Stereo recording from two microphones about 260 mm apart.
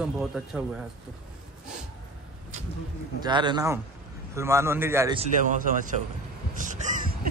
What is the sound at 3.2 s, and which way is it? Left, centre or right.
A man's voice, centre.